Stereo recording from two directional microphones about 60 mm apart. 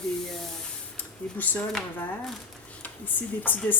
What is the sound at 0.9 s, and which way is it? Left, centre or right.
Speech, left.